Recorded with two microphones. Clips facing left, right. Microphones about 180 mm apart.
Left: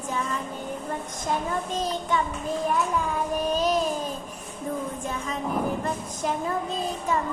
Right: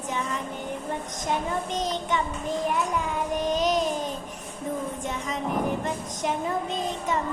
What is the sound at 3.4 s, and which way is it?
Child singing, 20° right (ahead or behind).